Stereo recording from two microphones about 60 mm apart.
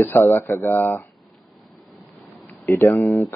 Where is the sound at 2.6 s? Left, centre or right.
Left.